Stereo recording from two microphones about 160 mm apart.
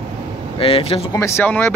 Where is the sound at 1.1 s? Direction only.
15° left (ahead or behind).